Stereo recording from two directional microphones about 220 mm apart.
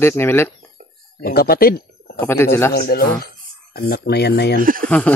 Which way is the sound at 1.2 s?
45° left (ahead or behind).